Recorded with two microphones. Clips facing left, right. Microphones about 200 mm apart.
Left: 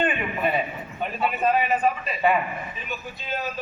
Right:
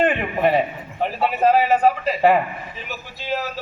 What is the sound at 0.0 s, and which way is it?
A man's voice, 85° right.